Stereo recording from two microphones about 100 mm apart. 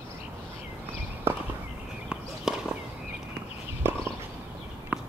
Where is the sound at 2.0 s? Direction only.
5° right (ahead or behind).